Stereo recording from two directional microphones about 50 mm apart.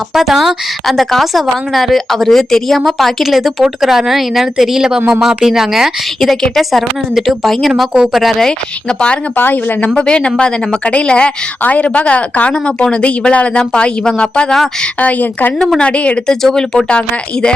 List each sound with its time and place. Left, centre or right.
0.1 s a woman's voice: centre
6.1 s a woman's voice: centre
9.3 s a woman's voice: left; by 14.5 s centre
14.9 s a woman's voice: left
16.3 s speech: centre